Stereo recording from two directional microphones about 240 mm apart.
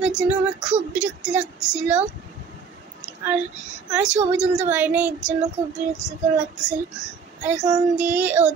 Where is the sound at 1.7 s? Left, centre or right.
Centre.